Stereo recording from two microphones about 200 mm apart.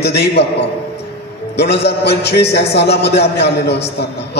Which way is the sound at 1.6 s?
55° left (ahead or behind).